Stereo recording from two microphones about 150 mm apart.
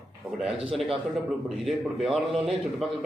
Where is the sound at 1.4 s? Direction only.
Centre (ahead or behind).